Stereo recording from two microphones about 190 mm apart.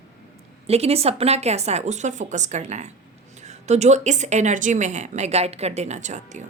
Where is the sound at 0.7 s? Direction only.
30° right (ahead or behind).